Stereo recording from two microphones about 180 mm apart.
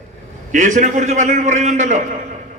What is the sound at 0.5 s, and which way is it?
A man's voice, 45° right (ahead or behind).